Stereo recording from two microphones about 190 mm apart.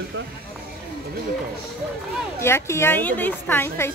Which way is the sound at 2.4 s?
15° left (ahead or behind).